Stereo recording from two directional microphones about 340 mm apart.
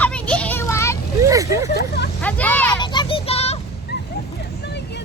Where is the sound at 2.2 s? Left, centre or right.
Centre.